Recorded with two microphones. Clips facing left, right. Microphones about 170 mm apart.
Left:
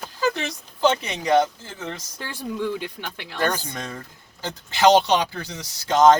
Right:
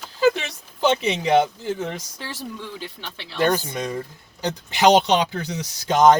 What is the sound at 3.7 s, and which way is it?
Speech, 15° right (ahead or behind).